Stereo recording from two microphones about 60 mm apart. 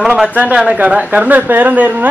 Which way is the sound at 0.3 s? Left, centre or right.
Right.